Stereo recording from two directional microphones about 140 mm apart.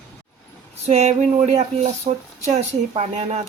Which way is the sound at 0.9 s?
50° right (ahead or behind).